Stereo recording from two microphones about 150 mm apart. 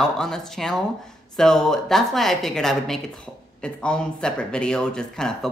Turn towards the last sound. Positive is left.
turn(degrees=5)  # may be behind; listen again after turning